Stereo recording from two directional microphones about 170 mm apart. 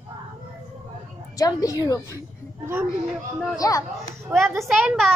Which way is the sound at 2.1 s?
15° right (ahead or behind).